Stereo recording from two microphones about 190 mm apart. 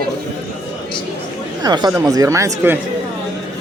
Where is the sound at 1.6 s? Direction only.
20° right (ahead or behind).